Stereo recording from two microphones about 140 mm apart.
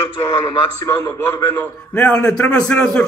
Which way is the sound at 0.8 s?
20° left (ahead or behind).